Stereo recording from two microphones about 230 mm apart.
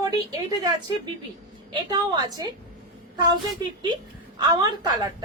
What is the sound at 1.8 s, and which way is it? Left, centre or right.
Speech, centre.